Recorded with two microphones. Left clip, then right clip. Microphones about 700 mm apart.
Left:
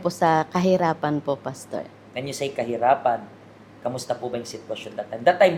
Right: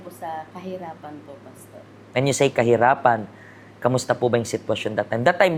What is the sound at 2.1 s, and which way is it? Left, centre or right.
Speech, right.